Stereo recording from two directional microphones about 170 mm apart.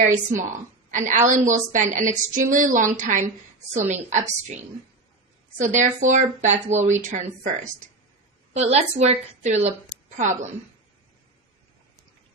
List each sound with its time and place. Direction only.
0.9 s a woman's voice: 50° right (ahead or behind)